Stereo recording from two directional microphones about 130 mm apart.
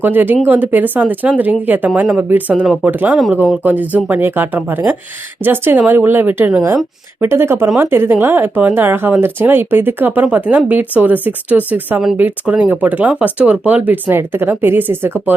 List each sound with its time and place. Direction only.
0.0 s speech: 15° right (ahead or behind)